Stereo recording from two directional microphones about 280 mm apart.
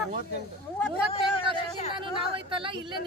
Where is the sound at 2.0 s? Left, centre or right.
Centre.